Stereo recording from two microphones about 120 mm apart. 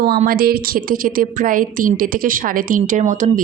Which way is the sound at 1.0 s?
90° right.